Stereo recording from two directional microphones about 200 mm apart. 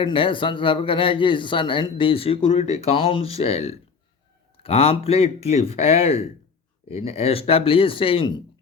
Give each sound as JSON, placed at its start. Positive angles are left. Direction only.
{"t": 0.0, "sound": "a man's voice", "side_deg": 25}